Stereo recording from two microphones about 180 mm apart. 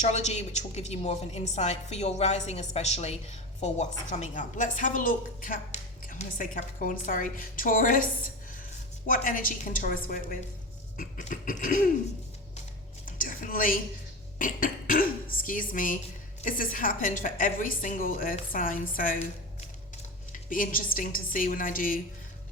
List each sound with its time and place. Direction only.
0.0 s a woman's voice: 40° left (ahead or behind)
9.0 s a woman's voice: 50° left (ahead or behind)
13.1 s a sound: 50° left (ahead or behind)
14.3 s a woman's voice: 50° left (ahead or behind)
20.3 s a woman's voice: 50° left (ahead or behind)